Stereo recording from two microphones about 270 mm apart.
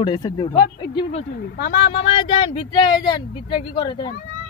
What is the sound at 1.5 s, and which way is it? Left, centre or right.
Speech, left.